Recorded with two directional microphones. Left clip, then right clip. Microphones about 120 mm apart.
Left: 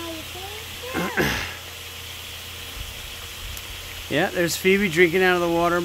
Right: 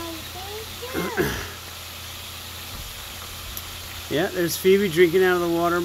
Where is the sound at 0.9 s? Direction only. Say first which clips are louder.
Left 2 dB; 35° left (ahead or behind).